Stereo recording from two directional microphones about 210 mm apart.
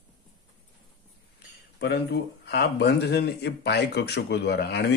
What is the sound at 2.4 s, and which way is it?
Speech, 50° left (ahead or behind).